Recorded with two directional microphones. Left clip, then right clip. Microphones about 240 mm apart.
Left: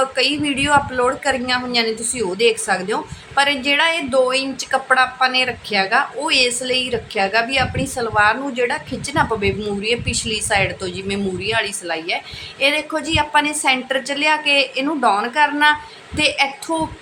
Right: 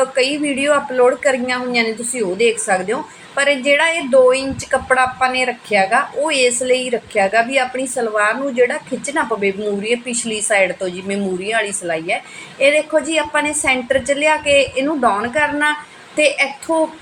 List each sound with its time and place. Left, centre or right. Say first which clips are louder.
0.2 s a woman's voice: right 1 dB; centre